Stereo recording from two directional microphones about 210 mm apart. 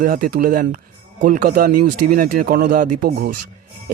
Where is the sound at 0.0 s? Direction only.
40° right (ahead or behind).